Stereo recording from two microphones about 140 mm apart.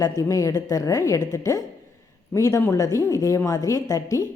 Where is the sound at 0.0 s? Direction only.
25° left (ahead or behind).